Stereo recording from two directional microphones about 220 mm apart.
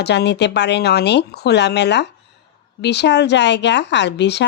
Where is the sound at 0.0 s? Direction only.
50° left (ahead or behind).